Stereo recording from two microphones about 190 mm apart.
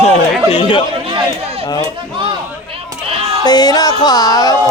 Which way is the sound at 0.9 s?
30° right (ahead or behind).